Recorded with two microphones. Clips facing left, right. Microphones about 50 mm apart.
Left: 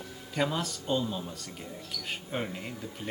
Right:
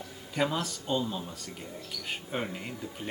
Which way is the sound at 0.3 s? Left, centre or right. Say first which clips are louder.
Even; centre.